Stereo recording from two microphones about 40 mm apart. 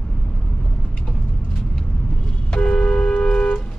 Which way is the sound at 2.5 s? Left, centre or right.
Left.